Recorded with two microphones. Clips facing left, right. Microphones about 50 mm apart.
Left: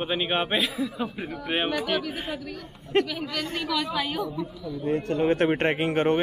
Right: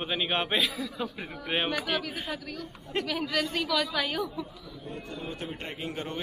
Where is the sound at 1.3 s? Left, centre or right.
Centre.